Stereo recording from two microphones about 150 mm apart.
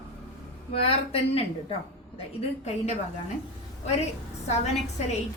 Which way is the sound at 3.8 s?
45° left (ahead or behind).